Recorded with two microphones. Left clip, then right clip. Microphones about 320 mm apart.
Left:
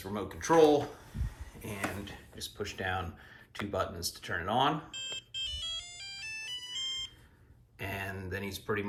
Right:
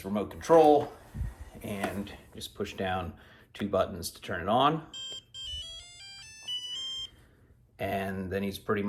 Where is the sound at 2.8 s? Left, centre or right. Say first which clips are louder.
Right 3 dB; right.